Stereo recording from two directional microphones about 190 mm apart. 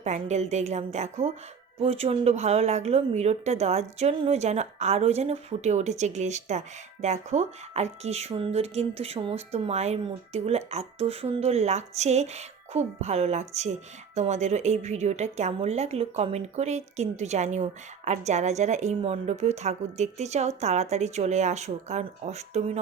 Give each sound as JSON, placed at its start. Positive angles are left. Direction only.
{"t": 0.0, "sound": "a woman's voice", "side_deg": -35}